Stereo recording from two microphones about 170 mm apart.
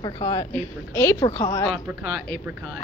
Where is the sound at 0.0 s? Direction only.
20° left (ahead or behind).